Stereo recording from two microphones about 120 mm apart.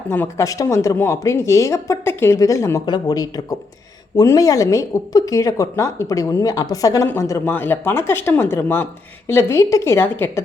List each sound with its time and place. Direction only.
0.1 s speech: 20° left (ahead or behind)